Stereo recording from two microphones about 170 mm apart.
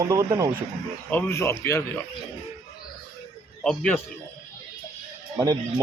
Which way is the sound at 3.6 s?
5° left (ahead or behind).